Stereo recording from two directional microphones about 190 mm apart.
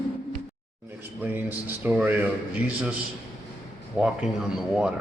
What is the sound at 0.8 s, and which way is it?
Speech, 10° right (ahead or behind).